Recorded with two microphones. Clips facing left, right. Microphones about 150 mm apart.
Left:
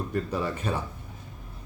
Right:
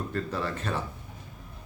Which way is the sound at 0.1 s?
15° left (ahead or behind).